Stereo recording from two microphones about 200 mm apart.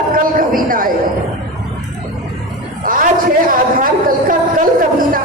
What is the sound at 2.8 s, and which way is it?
A woman's voice, 45° right (ahead or behind).